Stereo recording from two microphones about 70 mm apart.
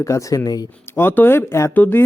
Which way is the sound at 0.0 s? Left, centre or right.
Left.